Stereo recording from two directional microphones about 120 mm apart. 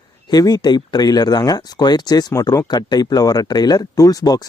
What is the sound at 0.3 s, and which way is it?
Speech, 35° left (ahead or behind).